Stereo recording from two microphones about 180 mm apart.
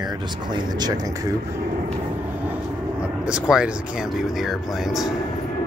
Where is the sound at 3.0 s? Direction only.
5° right (ahead or behind).